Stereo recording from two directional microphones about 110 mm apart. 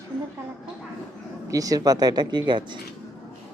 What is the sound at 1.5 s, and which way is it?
A woman's voice, 30° right (ahead or behind).